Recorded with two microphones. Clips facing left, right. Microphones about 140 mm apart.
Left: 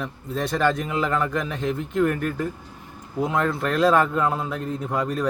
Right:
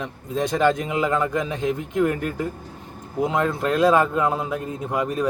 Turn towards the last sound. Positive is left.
turn(degrees=-10)  # may be behind; listen again after turning